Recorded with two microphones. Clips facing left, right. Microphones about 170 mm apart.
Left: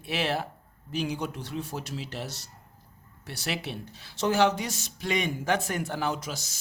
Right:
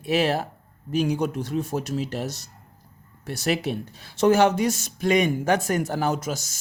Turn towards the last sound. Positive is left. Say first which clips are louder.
# right 6 dB
turn(degrees=-45)  # may be behind; listen again after turning